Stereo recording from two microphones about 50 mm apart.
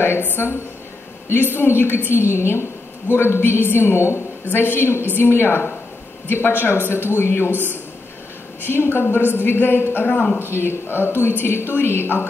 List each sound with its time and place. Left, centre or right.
0.0 s a woman's voice: left
4.5 s a woman's voice: left
10.4 s a woman's voice: left